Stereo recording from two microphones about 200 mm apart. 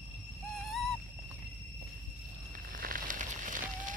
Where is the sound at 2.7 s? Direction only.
45° right (ahead or behind).